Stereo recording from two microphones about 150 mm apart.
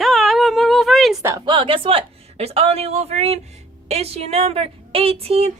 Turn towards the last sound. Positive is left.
turn(degrees=-40)  # may be behind; listen again after turning